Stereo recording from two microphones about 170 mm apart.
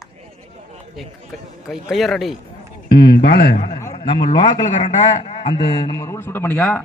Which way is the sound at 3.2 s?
70° left (ahead or behind).